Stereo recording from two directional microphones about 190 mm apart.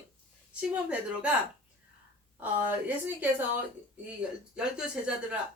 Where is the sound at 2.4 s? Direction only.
10° right (ahead or behind).